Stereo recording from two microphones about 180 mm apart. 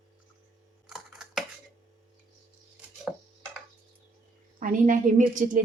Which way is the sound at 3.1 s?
10° right (ahead or behind).